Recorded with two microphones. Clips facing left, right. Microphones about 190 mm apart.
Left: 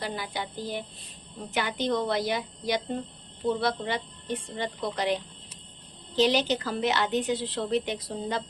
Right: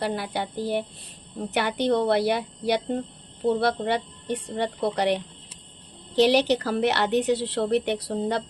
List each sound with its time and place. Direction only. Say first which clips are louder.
0.0 s a woman's voice: right 6 dB; 65° right (ahead or behind)